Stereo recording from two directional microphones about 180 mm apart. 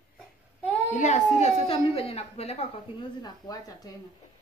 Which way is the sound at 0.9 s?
40° left (ahead or behind).